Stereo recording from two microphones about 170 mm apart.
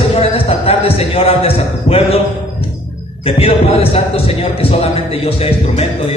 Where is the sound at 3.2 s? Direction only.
35° left (ahead or behind).